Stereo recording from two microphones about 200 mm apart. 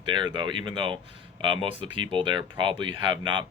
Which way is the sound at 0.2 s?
25° right (ahead or behind).